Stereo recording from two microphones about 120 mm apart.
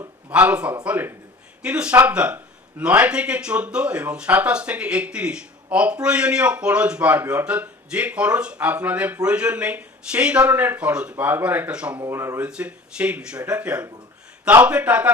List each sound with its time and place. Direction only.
0.3 s a man's voice: 10° right (ahead or behind)
11.9 s speech: 20° right (ahead or behind)
12.5 s speech: 10° right (ahead or behind)